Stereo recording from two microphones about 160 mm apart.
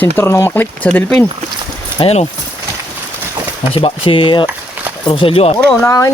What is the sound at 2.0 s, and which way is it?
Speech, 40° left (ahead or behind).